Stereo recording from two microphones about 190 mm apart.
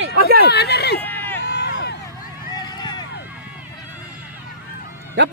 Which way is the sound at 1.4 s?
65° left (ahead or behind).